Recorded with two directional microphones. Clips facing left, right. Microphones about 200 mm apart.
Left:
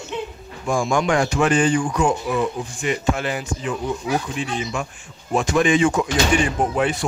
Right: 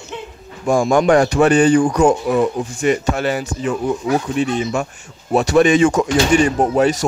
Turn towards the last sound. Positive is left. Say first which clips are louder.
# right 6 dB
turn(degrees=-40)  # may be behind; listen again after turning